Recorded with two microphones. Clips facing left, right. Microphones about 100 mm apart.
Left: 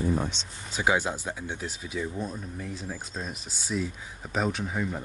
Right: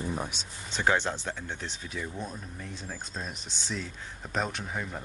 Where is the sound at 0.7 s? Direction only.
5° left (ahead or behind).